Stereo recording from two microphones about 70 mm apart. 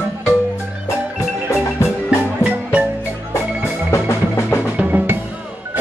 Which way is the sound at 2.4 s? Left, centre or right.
Centre.